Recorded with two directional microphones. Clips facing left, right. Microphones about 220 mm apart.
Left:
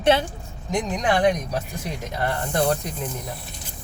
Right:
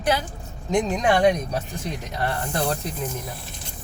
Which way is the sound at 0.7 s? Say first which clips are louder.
Right 2 dB; 25° right (ahead or behind).